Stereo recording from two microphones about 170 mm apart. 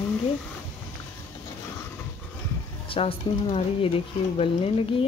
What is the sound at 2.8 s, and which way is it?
Speech, 30° left (ahead or behind).